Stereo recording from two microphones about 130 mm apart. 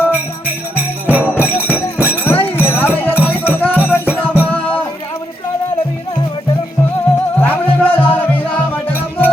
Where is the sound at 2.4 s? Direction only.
15° left (ahead or behind).